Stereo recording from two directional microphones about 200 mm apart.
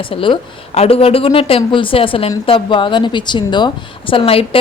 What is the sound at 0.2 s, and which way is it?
A woman's voice, 30° left (ahead or behind).